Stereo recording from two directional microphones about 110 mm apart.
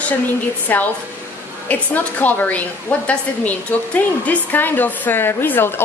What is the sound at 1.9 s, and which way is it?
Speech, 15° left (ahead or behind).